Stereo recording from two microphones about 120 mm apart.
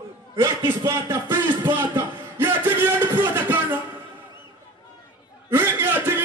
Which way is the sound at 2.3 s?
20° right (ahead or behind).